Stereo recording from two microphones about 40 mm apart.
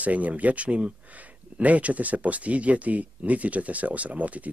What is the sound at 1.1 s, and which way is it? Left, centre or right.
Speech, right.